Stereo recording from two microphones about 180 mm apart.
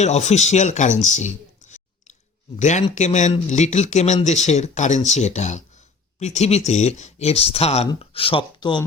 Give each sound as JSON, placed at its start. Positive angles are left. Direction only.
{"t": 0.0, "sound": "speech", "side_deg": 40}